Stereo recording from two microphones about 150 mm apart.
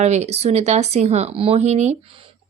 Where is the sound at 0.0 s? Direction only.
45° right (ahead or behind).